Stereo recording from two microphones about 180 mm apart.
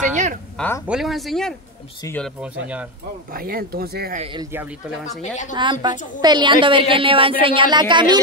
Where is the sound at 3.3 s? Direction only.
55° right (ahead or behind).